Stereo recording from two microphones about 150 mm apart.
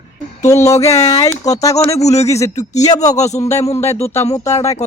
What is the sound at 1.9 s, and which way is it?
Speech, 45° left (ahead or behind).